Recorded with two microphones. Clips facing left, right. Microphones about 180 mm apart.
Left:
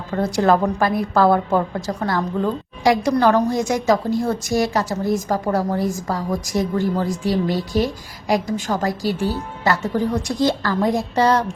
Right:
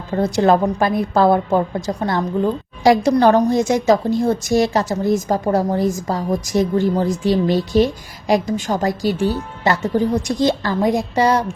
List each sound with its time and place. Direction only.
0.1 s a woman's voice: 20° right (ahead or behind)